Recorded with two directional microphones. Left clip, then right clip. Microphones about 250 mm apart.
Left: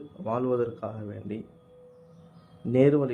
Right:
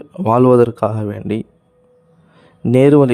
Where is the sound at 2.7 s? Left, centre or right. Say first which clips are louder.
Right 12 dB; right.